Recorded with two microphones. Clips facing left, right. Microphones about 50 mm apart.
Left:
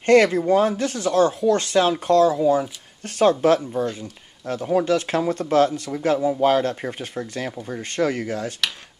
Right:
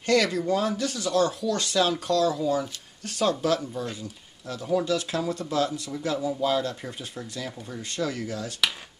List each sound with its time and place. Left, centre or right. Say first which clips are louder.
0.0 s speech: left 8 dB; left